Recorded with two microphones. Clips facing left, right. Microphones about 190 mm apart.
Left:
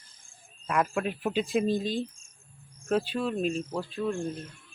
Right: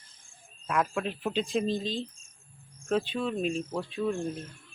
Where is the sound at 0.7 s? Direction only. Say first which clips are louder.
Left 1 dB; 5° left (ahead or behind).